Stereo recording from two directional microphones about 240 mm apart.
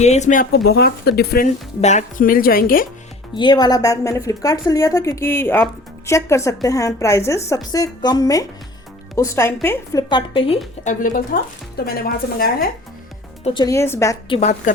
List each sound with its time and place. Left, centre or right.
0.0 s speech: left
3.3 s speech: centre
10.8 s speech: left
13.4 s speech: centre
14.3 s a woman's voice: left